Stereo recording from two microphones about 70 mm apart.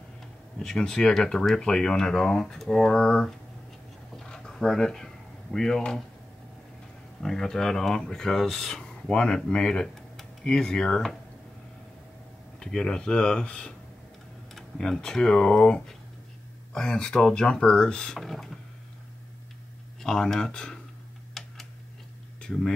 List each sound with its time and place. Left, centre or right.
0.6 s speech: centre
4.2 s a sound: centre
7.2 s speech: centre
12.5 s speech: centre
20.0 s speech: centre
21.3 s a sound: centre
22.4 s speech: centre